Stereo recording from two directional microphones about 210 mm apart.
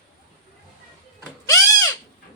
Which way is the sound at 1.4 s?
15° left (ahead or behind).